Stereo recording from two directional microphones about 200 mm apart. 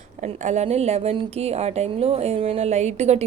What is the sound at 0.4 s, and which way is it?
Speech, 35° right (ahead or behind).